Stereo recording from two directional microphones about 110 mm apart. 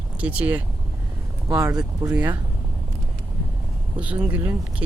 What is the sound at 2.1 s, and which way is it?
Speech, 15° right (ahead or behind).